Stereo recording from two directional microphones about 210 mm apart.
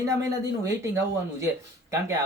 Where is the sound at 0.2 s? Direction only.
15° right (ahead or behind).